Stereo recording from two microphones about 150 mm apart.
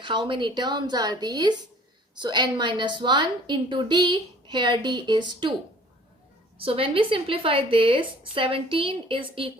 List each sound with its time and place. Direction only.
0.0 s a woman's voice: 30° right (ahead or behind)
6.6 s a woman's voice: 35° right (ahead or behind)